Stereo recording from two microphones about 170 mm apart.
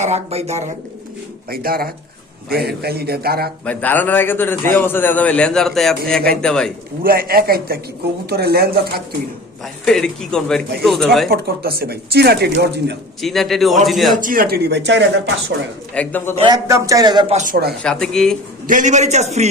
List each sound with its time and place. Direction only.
0.0 s a man's voice: 40° right (ahead or behind)
1.5 s speech: 60° right (ahead or behind)
3.7 s a man's voice: 10° left (ahead or behind)
7.0 s speech: 60° right (ahead or behind)
9.8 s a man's voice: 5° left (ahead or behind)
11.3 s speech: 65° right (ahead or behind)
13.2 s a man's voice: centre (ahead or behind)
14.2 s speech: 55° right (ahead or behind); by 15.0 s 90° right
16.0 s a man's voice: 10° left (ahead or behind)
16.4 s a man's voice: 20° right (ahead or behind)
17.3 s speech: 55° right (ahead or behind)
17.8 s a man's voice: 5° left (ahead or behind)
18.7 s a man's voice: 45° right (ahead or behind)